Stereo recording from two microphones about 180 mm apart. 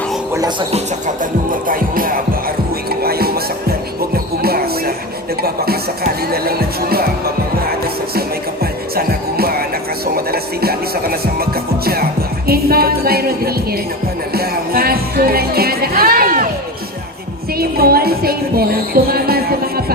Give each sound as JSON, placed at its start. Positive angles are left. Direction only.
{"t": 0.7, "sound": "speech", "side_deg": -45}
{"t": 2.9, "sound": "music", "side_deg": -60}
{"t": 6.3, "sound": "music", "side_deg": -60}
{"t": 9.0, "sound": "music", "side_deg": -55}
{"t": 17.6, "sound": "music", "side_deg": -55}